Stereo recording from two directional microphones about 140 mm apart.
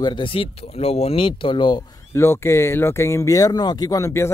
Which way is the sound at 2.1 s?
20° left (ahead or behind).